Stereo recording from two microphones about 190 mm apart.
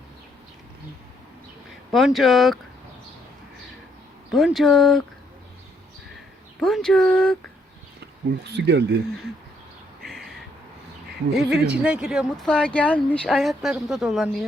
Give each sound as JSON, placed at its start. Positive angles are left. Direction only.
{"t": 1.9, "sound": "speech", "side_deg": 0}
{"t": 4.3, "sound": "speech", "side_deg": 0}
{"t": 6.6, "sound": "speech", "side_deg": 0}
{"t": 8.4, "sound": "speech", "side_deg": -60}
{"t": 10.1, "sound": "a sound", "side_deg": 0}
{"t": 11.3, "sound": "speech", "side_deg": -5}